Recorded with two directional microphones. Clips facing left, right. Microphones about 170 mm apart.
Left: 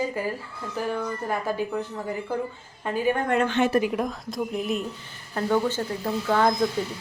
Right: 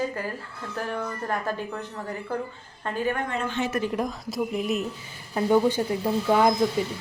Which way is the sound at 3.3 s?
70° left (ahead or behind).